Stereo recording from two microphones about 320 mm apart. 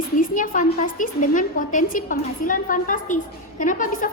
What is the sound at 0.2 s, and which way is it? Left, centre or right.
A woman's voice, left.